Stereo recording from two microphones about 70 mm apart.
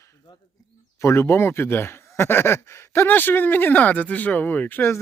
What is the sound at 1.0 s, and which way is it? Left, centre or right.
Speech, left.